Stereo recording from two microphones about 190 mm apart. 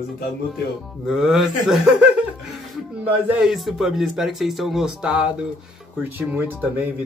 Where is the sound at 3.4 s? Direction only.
Centre (ahead or behind).